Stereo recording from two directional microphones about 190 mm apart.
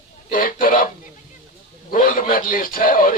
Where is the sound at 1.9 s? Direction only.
45° left (ahead or behind).